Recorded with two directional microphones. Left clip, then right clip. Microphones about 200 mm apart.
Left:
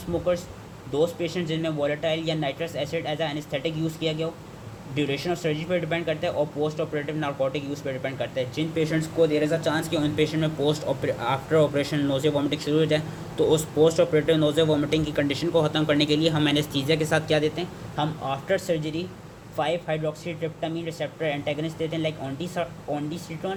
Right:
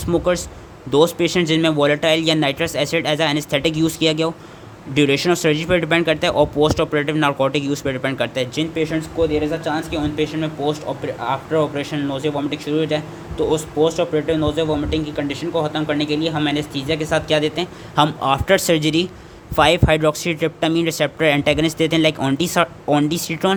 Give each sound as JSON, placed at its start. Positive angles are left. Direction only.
{"t": 0.1, "sound": "speech", "side_deg": -45}
{"t": 8.7, "sound": "speech", "side_deg": -10}
{"t": 17.9, "sound": "speech", "side_deg": -40}